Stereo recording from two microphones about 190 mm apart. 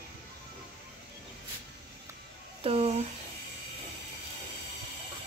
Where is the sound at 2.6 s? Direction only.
30° right (ahead or behind).